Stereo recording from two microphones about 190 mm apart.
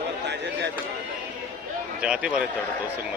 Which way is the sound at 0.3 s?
65° right (ahead or behind).